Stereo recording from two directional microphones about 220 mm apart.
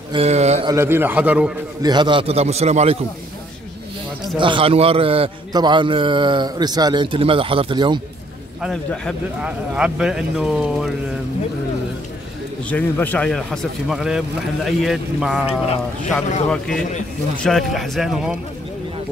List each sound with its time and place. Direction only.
0.1 s a man's voice: 30° right (ahead or behind)
0.7 s a man's voice: 10° right (ahead or behind)
1.8 s a man's voice: 20° right (ahead or behind)
4.4 s a man's voice: 25° right (ahead or behind)
8.5 s speech: centre (ahead or behind)
12.6 s speech: 5° left (ahead or behind)
16.4 s speech: 5° left (ahead or behind)